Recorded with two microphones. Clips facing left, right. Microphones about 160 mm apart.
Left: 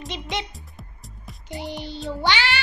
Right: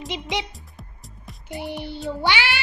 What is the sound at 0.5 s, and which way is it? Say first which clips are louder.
Music: even; centre (ahead or behind).